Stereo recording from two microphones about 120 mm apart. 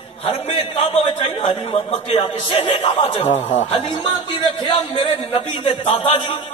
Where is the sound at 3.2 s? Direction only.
75° left (ahead or behind).